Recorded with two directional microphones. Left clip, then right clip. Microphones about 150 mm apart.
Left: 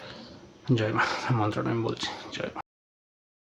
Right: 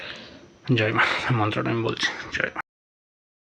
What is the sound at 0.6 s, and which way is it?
Speech, 10° right (ahead or behind).